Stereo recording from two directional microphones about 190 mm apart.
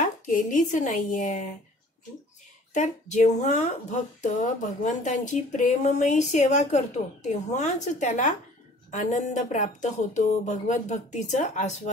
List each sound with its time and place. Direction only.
0.0 s speech: 40° left (ahead or behind)
2.7 s a woman's voice: 40° left (ahead or behind)